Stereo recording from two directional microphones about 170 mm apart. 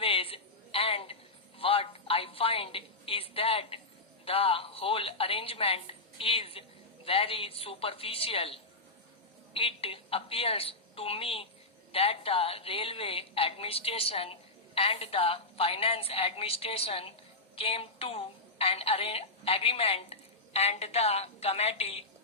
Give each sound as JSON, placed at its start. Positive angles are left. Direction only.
{"t": 0.0, "sound": "a sound", "side_deg": 35}
{"t": 1.5, "sound": "music", "side_deg": 35}
{"t": 4.3, "sound": "a woman's voice", "side_deg": 35}